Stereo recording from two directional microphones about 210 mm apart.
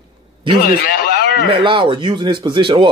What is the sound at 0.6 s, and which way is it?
Speech, 45° left (ahead or behind).